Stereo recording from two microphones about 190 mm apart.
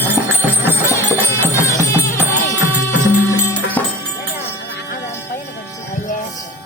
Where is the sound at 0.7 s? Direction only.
10° left (ahead or behind).